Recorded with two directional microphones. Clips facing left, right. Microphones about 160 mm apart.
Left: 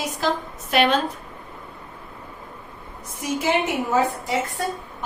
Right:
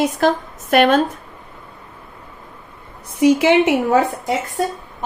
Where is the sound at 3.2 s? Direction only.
75° right (ahead or behind).